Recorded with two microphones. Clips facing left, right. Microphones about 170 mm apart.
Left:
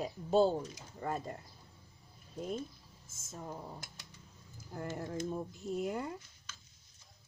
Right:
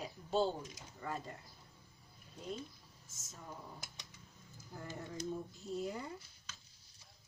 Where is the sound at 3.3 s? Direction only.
50° left (ahead or behind).